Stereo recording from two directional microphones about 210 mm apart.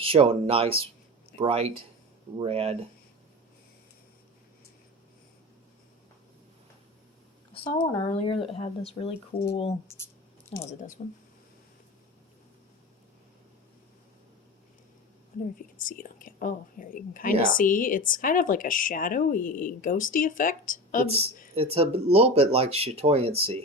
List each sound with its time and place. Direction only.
0.0 s speech: 25° right (ahead or behind)
7.5 s speech: 25° left (ahead or behind)
10.7 s speech: 35° left (ahead or behind)
15.5 s speech: 40° left (ahead or behind)
21.5 s speech: 30° right (ahead or behind)